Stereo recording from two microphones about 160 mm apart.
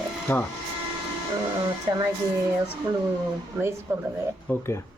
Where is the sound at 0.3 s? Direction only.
10° left (ahead or behind).